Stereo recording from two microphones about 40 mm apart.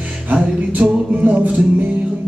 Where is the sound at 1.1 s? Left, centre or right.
Right.